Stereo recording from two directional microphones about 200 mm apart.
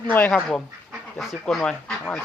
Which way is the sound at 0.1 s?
10° left (ahead or behind).